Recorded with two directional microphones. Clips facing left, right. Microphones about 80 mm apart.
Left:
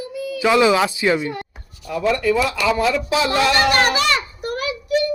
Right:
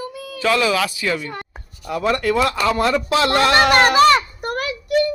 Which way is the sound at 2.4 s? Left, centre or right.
Right.